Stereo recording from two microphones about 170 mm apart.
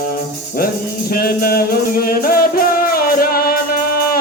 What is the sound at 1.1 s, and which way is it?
Music, 60° left (ahead or behind).